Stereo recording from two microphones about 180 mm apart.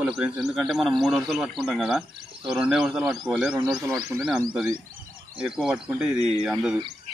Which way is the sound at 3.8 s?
15° right (ahead or behind).